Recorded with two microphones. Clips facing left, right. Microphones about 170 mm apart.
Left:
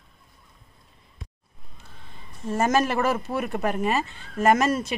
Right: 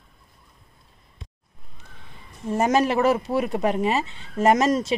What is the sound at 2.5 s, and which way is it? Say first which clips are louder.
Speech: right 2 dB; 15° right (ahead or behind).